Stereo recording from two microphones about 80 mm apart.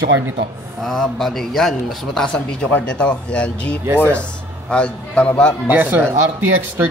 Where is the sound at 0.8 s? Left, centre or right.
Centre.